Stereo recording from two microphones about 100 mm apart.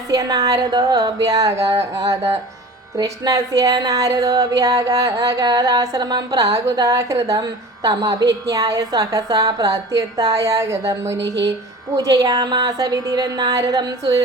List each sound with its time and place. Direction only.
0.1 s speech: 35° right (ahead or behind)